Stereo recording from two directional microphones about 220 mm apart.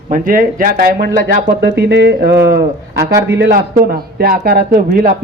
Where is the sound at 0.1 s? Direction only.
40° right (ahead or behind).